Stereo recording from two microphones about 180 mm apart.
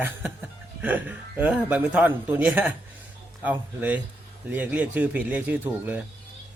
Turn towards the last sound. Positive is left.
turn(degrees=-10)  # may be behind; listen again after turning